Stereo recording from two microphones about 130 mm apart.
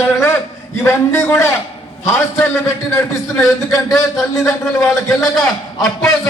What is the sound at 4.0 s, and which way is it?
Speech, 25° left (ahead or behind).